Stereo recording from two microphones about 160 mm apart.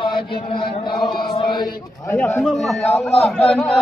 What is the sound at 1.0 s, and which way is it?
Chant, 30° left (ahead or behind).